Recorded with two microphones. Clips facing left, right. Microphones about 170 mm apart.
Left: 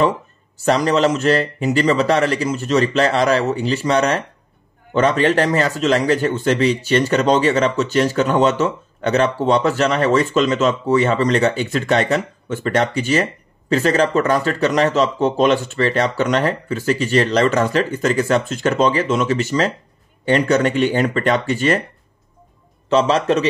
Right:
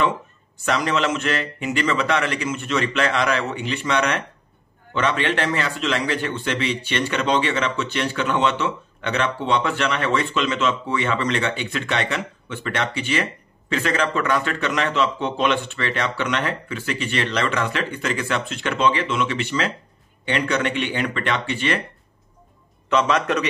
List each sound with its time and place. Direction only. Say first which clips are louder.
0.7 s a man's voice: left 6 dB; 35° left (ahead or behind)
22.8 s a man's voice: left 5 dB; 30° left (ahead or behind)